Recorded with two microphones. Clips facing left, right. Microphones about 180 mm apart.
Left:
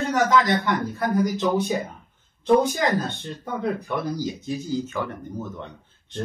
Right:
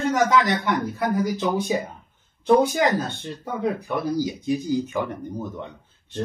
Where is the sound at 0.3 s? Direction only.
10° right (ahead or behind).